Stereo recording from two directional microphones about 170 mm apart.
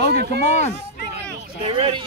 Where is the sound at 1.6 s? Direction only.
30° right (ahead or behind).